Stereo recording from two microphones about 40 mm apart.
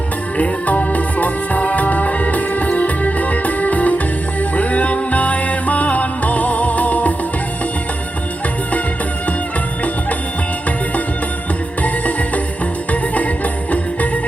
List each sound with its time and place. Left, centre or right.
0.3 s music: left
11.8 s music: left